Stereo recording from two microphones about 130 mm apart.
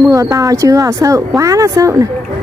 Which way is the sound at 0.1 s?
25° right (ahead or behind).